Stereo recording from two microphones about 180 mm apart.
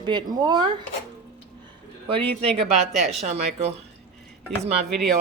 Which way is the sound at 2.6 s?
35° right (ahead or behind).